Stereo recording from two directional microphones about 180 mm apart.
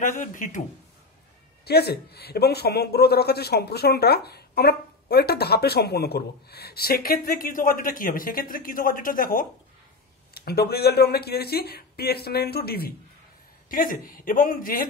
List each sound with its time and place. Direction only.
0.2 s a man's voice: 45° left (ahead or behind)
1.6 s a man's voice: 60° left (ahead or behind)
10.3 s a man's voice: 60° left (ahead or behind)